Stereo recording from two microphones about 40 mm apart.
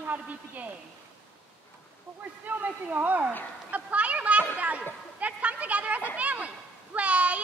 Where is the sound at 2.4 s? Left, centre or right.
Right.